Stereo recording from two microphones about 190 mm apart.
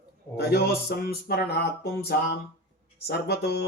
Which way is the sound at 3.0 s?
60° left (ahead or behind).